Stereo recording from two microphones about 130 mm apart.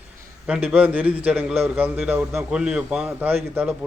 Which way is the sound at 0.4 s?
10° right (ahead or behind).